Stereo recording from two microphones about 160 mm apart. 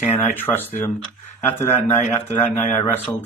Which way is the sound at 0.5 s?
10° left (ahead or behind).